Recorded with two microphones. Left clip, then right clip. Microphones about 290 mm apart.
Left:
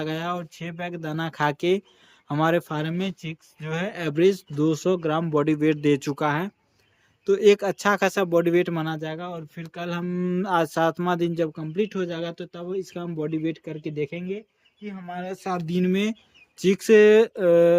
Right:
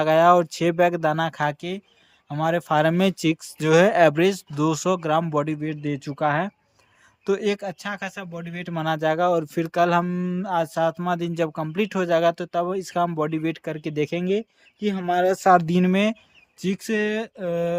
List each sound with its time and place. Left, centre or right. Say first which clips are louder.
0.0 s speech: right 13 dB; centre
8.7 s speech: right 7 dB; centre
16.6 s speech: left 9 dB; centre